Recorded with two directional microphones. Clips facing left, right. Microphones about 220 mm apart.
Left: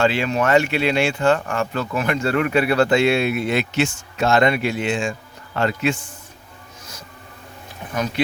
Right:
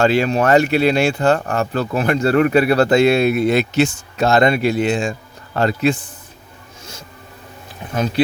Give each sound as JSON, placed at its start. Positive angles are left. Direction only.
{"t": 0.0, "sound": "speech", "side_deg": -40}
{"t": 7.9, "sound": "speech", "side_deg": -30}